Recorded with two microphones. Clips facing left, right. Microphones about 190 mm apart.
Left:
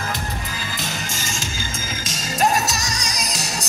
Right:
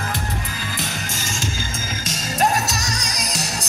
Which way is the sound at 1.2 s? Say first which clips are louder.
Right 2 dB; 55° right (ahead or behind).